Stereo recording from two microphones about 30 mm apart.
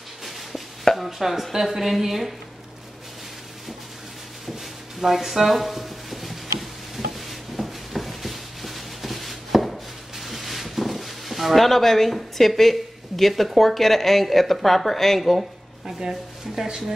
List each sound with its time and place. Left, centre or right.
0.9 s chopping: centre
5.0 s speech: centre
7.2 s a sound: centre
16.0 s speech: centre